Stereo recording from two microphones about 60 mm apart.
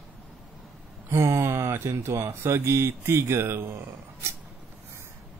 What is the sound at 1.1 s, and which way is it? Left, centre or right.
Speech, right.